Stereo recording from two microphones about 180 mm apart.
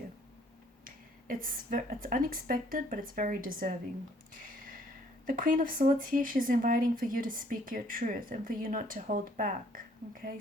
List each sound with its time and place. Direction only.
0.9 s speech: 50° right (ahead or behind)
4.4 s a sound: 50° right (ahead or behind)
5.2 s speech: 50° right (ahead or behind)